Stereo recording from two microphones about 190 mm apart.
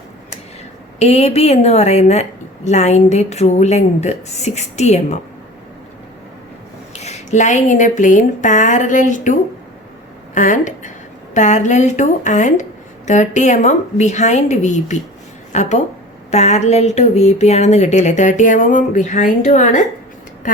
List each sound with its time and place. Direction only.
0.9 s speech: 35° left (ahead or behind)
6.9 s speech: 35° left (ahead or behind)
10.3 s speech: 40° left (ahead or behind)